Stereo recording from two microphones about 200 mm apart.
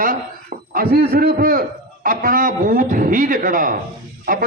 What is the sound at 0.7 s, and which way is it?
A man's voice, 45° right (ahead or behind).